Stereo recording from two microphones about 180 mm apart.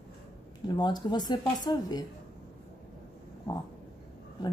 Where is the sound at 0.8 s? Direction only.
25° left (ahead or behind).